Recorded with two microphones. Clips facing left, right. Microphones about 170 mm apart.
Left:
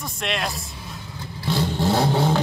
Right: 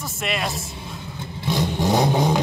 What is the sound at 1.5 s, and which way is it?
Vehicle, 15° right (ahead or behind).